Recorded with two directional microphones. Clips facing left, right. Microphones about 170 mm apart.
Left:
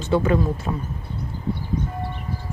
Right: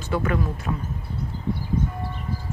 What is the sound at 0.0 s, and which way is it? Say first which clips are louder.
Speech: left 5 dB; 25° left (ahead or behind).